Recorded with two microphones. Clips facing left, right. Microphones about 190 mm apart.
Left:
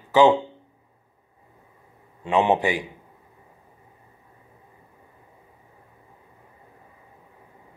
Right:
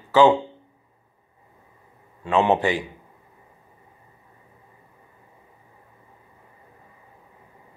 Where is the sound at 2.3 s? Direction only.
15° left (ahead or behind).